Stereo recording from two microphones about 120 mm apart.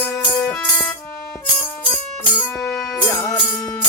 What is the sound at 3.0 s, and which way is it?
Music, 25° left (ahead or behind).